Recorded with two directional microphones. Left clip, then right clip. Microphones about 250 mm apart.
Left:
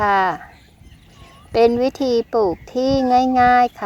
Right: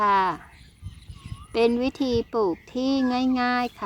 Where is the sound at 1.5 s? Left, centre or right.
Centre.